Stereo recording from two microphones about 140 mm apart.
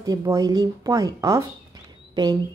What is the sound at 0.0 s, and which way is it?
A woman's voice, 25° right (ahead or behind).